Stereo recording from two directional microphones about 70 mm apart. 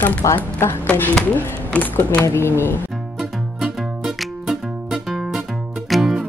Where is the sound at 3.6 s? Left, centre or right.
Centre.